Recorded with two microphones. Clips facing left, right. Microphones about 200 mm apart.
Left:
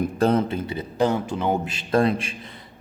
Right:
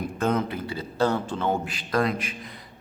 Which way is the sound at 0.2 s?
30° left (ahead or behind).